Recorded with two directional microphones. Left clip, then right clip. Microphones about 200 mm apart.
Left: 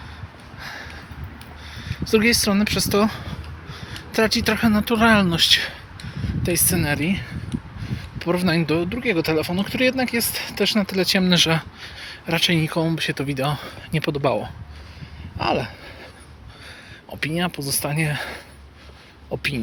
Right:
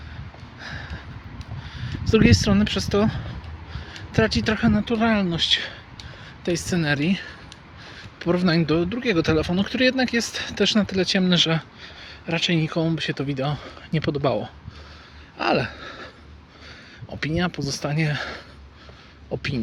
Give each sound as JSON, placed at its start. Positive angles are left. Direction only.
{"t": 0.6, "sound": "sniff", "side_deg": -10}
{"t": 1.7, "sound": "speech", "side_deg": -15}
{"t": 15.4, "sound": "a sound", "side_deg": -20}
{"t": 17.1, "sound": "speech", "side_deg": -20}